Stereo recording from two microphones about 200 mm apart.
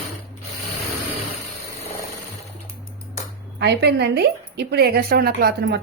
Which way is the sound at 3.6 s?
55° right (ahead or behind).